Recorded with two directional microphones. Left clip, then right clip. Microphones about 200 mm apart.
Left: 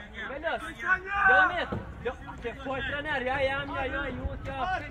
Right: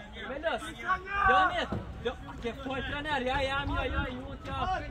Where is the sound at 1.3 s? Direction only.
65° right (ahead or behind).